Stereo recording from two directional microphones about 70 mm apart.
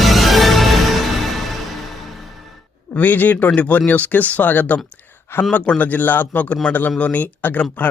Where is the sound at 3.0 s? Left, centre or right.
Left.